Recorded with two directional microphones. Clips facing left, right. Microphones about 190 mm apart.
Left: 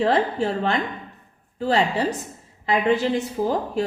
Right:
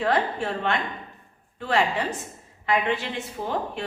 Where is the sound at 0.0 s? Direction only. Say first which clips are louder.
Left 4 dB; 30° left (ahead or behind).